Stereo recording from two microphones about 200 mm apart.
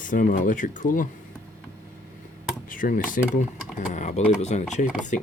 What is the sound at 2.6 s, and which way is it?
Speech, 45° left (ahead or behind).